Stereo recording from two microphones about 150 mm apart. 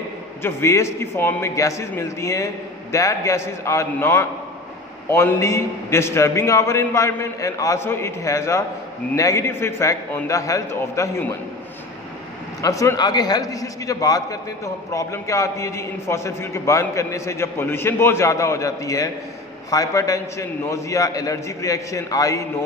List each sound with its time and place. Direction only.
0.4 s a man's voice: 15° left (ahead or behind)
12.6 s a man's voice: 20° left (ahead or behind)